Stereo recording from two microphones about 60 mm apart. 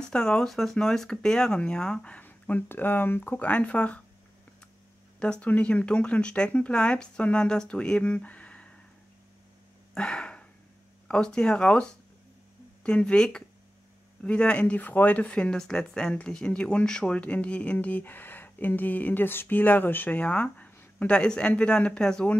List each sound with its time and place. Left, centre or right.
0.0 s speech: centre
2.2 s speech: left
5.2 s speech: centre
8.0 s a sound: left
9.9 s a sound: centre
11.1 s speech: centre